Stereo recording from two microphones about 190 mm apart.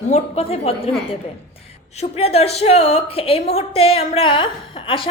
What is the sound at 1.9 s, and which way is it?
A woman's voice, 35° left (ahead or behind).